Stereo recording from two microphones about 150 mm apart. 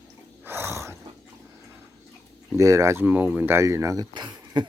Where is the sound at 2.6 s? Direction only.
20° right (ahead or behind).